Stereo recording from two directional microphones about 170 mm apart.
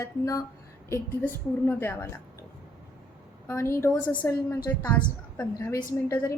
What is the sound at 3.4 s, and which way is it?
A woman's voice, 15° left (ahead or behind).